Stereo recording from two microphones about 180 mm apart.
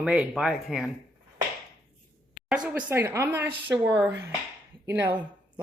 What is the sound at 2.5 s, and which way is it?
Speech, 5° right (ahead or behind).